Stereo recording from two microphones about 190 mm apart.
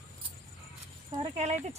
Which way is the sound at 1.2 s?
35° right (ahead or behind).